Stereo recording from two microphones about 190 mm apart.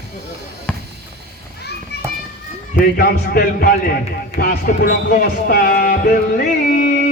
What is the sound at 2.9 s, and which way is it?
Speech, 55° left (ahead or behind).